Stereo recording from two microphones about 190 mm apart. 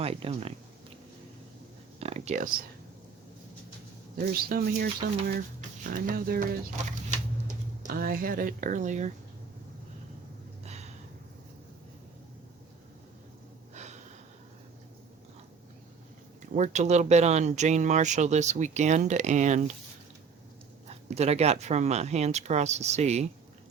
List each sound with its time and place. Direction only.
0.0 s speech: 30° right (ahead or behind)
2.0 s a sound: 35° right (ahead or behind)
4.2 s speech: 50° right (ahead or behind)
6.8 s speech: 40° right (ahead or behind)
16.4 s speech: 40° right (ahead or behind)
21.1 s speech: 35° right (ahead or behind)